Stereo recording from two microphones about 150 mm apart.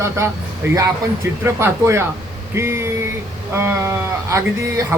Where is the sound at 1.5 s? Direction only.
15° right (ahead or behind).